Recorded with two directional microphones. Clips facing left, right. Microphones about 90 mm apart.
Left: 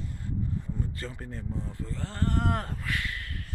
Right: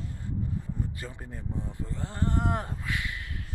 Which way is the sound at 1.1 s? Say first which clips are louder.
Left 1 dB; 15° right (ahead or behind).